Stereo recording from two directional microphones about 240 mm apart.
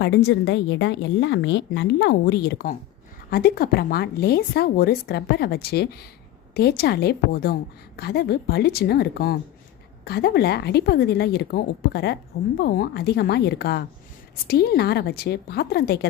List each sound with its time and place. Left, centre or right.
0.0 s a woman's voice: left